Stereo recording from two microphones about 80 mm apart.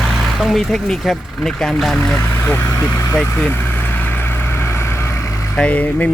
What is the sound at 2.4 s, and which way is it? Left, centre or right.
Speech, left.